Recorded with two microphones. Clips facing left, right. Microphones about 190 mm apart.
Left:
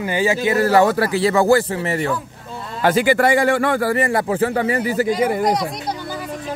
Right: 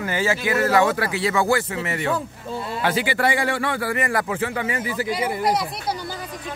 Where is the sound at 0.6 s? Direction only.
35° left (ahead or behind).